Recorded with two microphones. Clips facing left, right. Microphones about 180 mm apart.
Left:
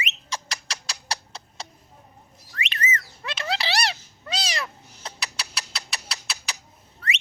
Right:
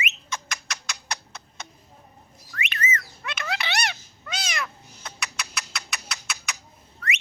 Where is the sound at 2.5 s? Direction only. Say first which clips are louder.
Even; 30° left (ahead or behind).